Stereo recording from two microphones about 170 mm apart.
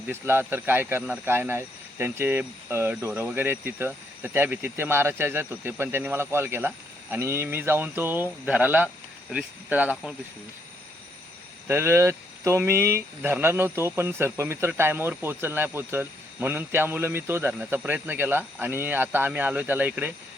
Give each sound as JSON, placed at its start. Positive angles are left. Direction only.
{"t": 0.1, "sound": "speech", "side_deg": -15}
{"t": 11.7, "sound": "speech", "side_deg": -15}